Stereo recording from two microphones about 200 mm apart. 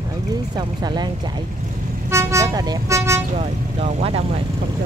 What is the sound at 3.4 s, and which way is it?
Speech, 30° right (ahead or behind).